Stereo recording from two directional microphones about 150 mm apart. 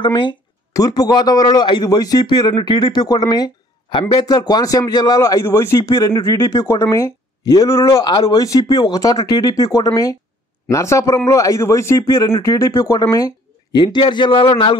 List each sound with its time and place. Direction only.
0.0 s a man's voice: 30° left (ahead or behind)